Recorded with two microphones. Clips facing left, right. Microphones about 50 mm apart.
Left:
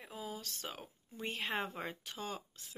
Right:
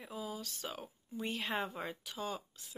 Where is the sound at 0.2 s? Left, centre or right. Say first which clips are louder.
Right 1 dB; left.